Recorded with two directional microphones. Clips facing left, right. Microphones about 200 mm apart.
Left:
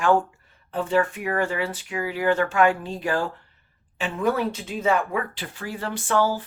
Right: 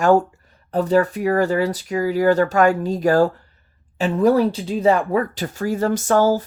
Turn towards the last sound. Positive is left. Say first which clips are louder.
# right 6 dB
turn(degrees=-40)  # may be behind; listen again after turning